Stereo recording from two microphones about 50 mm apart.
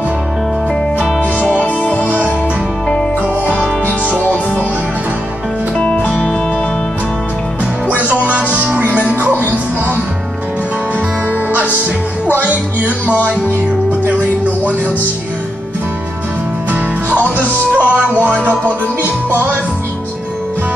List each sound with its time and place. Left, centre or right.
1.6 s music: left
3.4 s music: right
8.2 s music: right
13.0 s music: left
17.7 s music: right